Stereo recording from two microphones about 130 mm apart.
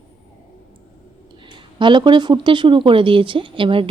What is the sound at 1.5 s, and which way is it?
Speech, 40° right (ahead or behind).